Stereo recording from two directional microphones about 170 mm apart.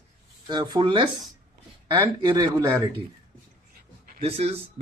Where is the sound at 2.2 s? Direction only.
25° right (ahead or behind).